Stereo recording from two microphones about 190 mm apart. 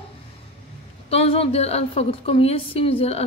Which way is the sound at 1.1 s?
30° left (ahead or behind).